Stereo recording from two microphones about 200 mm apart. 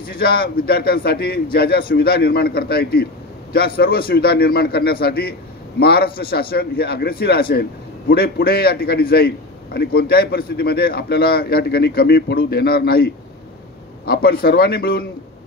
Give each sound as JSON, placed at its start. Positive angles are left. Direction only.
{"t": 0.0, "sound": "a man's voice", "side_deg": 50}